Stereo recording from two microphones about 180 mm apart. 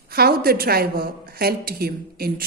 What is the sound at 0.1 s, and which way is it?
A woman's voice, 60° right (ahead or behind).